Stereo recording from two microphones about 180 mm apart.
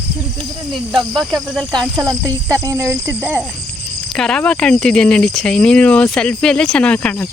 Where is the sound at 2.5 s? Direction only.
15° right (ahead or behind).